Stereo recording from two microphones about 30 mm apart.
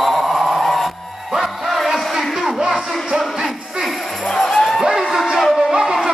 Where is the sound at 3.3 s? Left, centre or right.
Centre.